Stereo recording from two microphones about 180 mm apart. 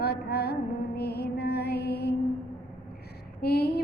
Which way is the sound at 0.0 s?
60° left (ahead or behind).